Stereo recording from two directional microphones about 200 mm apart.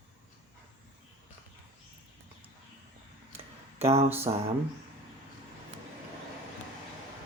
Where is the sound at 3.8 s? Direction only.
30° right (ahead or behind).